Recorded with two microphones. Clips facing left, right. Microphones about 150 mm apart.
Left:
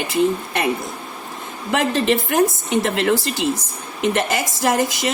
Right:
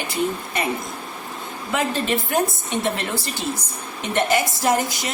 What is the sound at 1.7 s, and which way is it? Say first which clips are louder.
A woman's voice: left 4 dB; 90° left.